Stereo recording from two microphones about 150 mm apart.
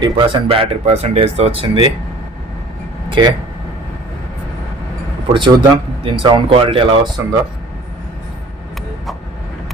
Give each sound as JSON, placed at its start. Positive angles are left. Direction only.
{"t": 0.0, "sound": "speech", "side_deg": -35}
{"t": 3.1, "sound": "speech", "side_deg": -30}
{"t": 5.3, "sound": "speech", "side_deg": -35}